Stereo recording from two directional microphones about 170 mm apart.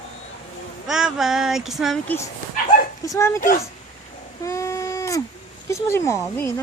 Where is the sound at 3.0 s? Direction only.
20° left (ahead or behind).